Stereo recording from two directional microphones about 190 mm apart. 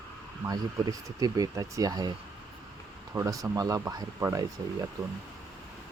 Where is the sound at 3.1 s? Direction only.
20° right (ahead or behind).